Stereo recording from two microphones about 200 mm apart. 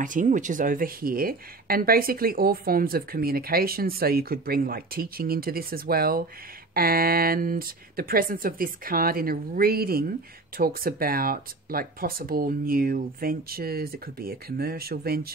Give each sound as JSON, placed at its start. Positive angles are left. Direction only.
{"t": 0.0, "sound": "speech", "side_deg": -40}